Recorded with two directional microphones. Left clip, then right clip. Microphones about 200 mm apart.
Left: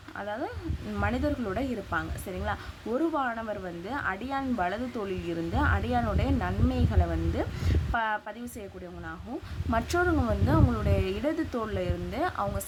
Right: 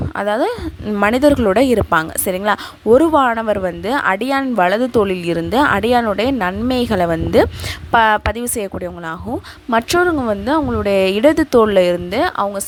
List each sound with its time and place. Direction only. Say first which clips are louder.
0.2 s a woman's voice: right 17 dB; 55° right (ahead or behind)
9.6 s a woman's voice: right 12 dB; 45° right (ahead or behind)